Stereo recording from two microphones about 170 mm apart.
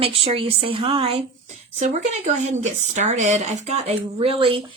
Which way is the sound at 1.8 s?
45° right (ahead or behind).